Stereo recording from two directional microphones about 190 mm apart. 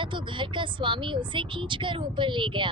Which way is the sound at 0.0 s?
25° right (ahead or behind).